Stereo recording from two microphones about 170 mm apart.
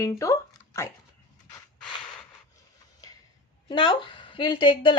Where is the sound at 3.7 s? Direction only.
30° left (ahead or behind).